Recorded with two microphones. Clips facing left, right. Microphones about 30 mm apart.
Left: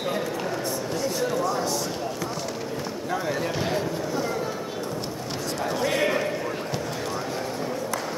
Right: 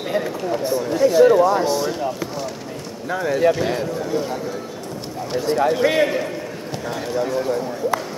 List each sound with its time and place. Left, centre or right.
0.5 s a sound: right
3.1 s speech: centre
5.5 s speech: centre